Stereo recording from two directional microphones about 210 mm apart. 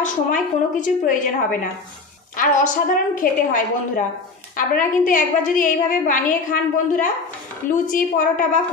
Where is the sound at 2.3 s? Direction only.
40° left (ahead or behind).